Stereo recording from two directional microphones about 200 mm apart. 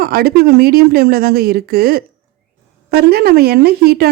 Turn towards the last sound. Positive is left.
turn(degrees=-50)  # may be behind; listen again after turning